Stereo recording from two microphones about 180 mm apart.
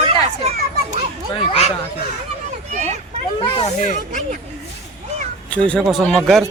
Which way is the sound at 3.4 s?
35° left (ahead or behind).